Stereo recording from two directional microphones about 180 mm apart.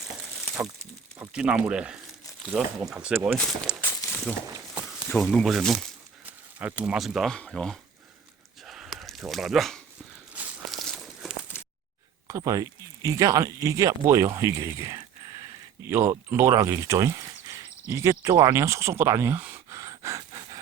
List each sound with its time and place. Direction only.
1.2 s speech: 5° right (ahead or behind)
3.3 s speech: 5° left (ahead or behind)
3.8 s walk: 10° left (ahead or behind)
4.5 s a sound: 20° right (ahead or behind)
5.0 s speech: 5° left (ahead or behind)
8.6 s a sound: centre (ahead or behind)
12.3 s speech: 20° right (ahead or behind)